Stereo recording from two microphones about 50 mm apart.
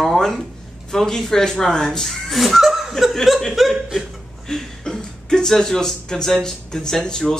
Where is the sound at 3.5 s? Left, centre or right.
Centre.